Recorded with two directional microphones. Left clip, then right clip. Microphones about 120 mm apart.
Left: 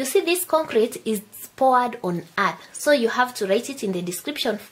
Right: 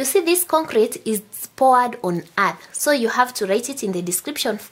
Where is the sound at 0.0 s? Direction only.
40° right (ahead or behind).